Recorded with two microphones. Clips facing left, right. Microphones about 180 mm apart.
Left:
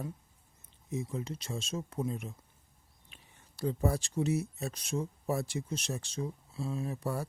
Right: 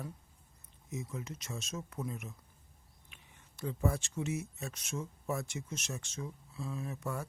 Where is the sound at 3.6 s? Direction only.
35° left (ahead or behind).